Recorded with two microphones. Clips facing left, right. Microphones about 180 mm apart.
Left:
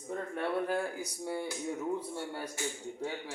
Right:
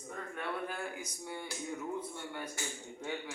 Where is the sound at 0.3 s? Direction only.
35° left (ahead or behind).